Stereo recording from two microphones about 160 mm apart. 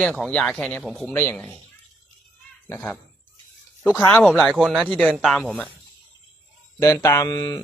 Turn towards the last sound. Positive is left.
turn(degrees=25)  # may be behind; listen again after turning